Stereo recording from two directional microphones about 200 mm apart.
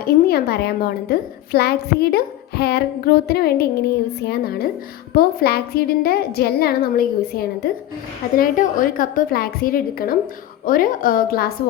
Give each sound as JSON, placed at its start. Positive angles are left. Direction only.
{"t": 0.3, "sound": "a woman's voice", "side_deg": 50}